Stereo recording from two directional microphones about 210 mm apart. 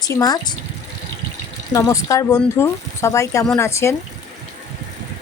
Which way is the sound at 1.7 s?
15° left (ahead or behind).